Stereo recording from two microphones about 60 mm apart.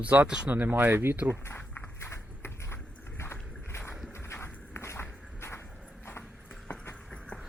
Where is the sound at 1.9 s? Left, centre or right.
Left.